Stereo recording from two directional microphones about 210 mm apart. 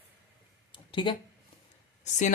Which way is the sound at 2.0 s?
35° left (ahead or behind).